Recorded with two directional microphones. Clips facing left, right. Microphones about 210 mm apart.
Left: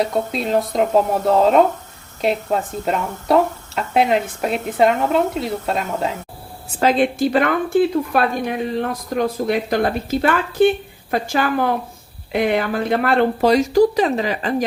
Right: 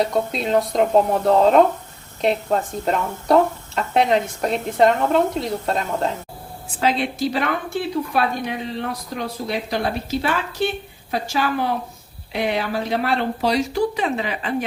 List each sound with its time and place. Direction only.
0.0 s speech: centre (ahead or behind)
6.7 s speech: 50° left (ahead or behind)